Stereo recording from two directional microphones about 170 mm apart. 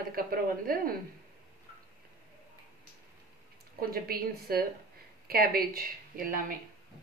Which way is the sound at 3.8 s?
60° right (ahead or behind).